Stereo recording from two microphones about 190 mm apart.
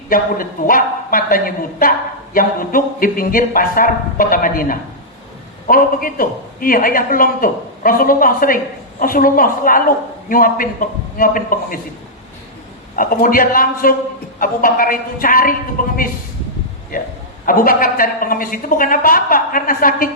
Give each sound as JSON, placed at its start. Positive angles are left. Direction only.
{"t": 0.1, "sound": "speech", "side_deg": 50}
{"t": 13.0, "sound": "speech", "side_deg": 50}